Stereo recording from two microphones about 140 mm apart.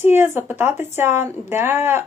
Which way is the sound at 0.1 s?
15° right (ahead or behind).